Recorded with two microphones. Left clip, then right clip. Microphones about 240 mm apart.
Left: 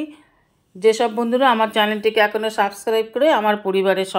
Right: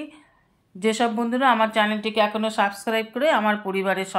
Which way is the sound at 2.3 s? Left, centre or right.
Left.